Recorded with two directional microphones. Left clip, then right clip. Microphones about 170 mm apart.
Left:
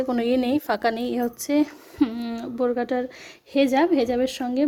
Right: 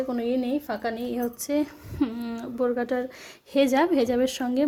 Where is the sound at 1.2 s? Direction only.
15° left (ahead or behind).